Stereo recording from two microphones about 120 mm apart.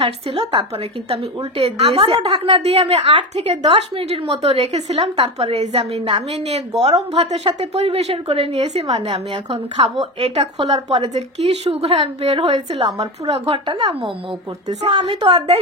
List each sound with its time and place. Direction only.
0.0 s a woman's voice: 50° right (ahead or behind)
1.1 s a woman's voice: 60° right (ahead or behind); by 14.1 s 45° right (ahead or behind)
14.8 s a woman's voice: 65° right (ahead or behind)